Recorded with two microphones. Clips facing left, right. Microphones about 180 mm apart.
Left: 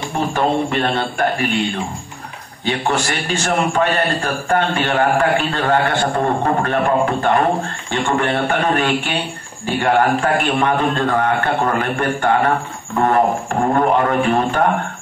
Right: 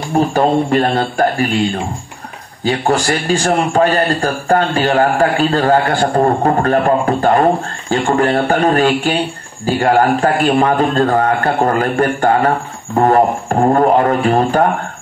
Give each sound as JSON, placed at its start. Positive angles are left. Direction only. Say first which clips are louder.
{"t": 0.3, "sound": "a man's voice", "louder": "right 2 dB", "side_deg": -35}
{"t": 2.6, "sound": "a man's voice", "louder": "right 5 dB", "side_deg": -35}